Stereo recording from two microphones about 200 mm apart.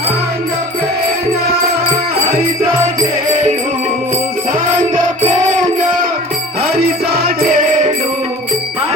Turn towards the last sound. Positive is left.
turn(degrees=-40)  # may be behind; listen again after turning